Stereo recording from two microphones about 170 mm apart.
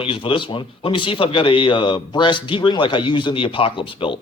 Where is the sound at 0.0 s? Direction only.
30° left (ahead or behind).